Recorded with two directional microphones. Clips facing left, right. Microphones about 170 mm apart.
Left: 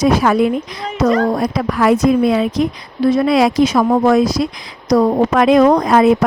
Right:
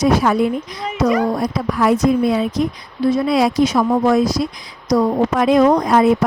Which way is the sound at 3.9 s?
65° left (ahead or behind).